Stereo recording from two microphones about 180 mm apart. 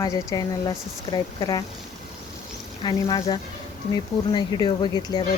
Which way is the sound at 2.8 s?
20° left (ahead or behind).